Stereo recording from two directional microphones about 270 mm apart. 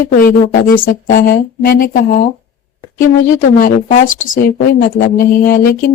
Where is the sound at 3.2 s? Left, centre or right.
Left.